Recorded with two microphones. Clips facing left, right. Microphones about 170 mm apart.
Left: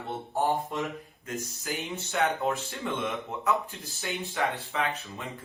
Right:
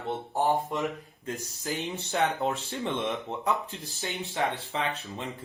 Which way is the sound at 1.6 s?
35° right (ahead or behind).